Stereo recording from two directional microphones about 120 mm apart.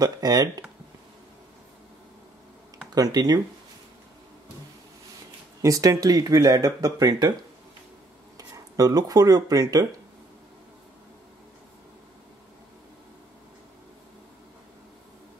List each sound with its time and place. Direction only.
0.0 s speech: 30° right (ahead or behind)
2.9 s speech: 35° right (ahead or behind)
5.6 s speech: 30° right (ahead or behind)
8.4 s speech: 30° right (ahead or behind)